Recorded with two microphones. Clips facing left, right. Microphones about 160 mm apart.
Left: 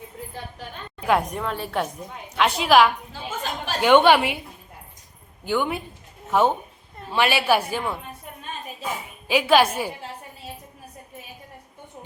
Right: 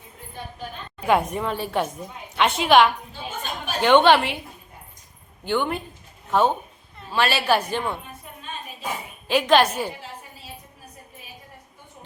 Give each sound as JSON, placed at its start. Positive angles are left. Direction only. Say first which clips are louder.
{"t": 1.0, "sound": "a woman's voice", "louder": "right 1 dB", "side_deg": 0}
{"t": 3.1, "sound": "a sound", "louder": "left 2 dB", "side_deg": 90}
{"t": 3.8, "sound": "a woman's voice", "louder": "even", "side_deg": 10}
{"t": 5.5, "sound": "a woman's voice", "louder": "even", "side_deg": 10}
{"t": 9.2, "sound": "a woman's voice", "louder": "even", "side_deg": 10}